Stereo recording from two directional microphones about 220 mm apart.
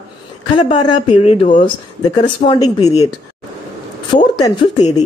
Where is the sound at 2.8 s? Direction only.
30° left (ahead or behind).